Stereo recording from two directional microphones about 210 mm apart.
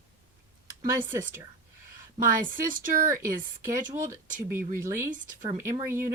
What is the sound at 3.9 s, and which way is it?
Speech, 10° right (ahead or behind).